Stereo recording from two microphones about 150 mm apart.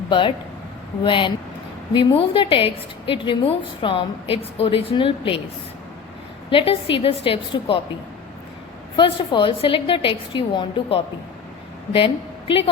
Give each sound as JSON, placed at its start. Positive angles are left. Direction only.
{"t": 0.1, "sound": "a woman's voice", "side_deg": 35}
{"t": 6.5, "sound": "a woman's voice", "side_deg": 35}
{"t": 9.0, "sound": "a woman's voice", "side_deg": 35}